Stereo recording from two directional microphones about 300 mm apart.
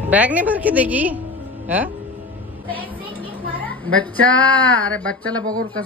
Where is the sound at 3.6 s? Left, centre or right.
Centre.